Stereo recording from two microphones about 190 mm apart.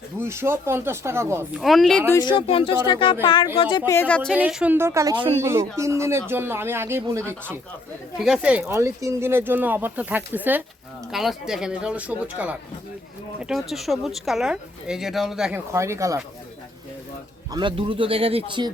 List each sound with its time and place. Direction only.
0.2 s speech: 10° right (ahead or behind)
1.6 s speech: centre (ahead or behind)
2.1 s speech: 25° left (ahead or behind)
3.9 s speech: 10° left (ahead or behind)
4.4 s speech: 5° right (ahead or behind); by 5.4 s 25° right (ahead or behind)
5.4 s speech: 15° right (ahead or behind)
8.6 s speech: 15° right (ahead or behind)
15.7 s speech: 15° right (ahead or behind)
17.5 s speech: 25° right (ahead or behind)